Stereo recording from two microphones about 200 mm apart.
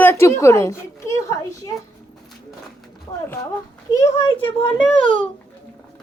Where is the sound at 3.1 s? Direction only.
20° left (ahead or behind).